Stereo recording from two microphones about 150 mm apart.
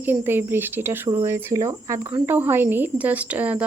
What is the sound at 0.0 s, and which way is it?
Speech, 15° right (ahead or behind).